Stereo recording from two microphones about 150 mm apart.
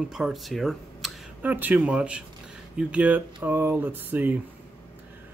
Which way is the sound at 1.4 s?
10° right (ahead or behind).